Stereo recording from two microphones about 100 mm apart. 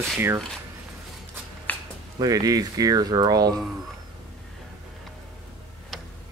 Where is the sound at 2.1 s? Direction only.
40° right (ahead or behind).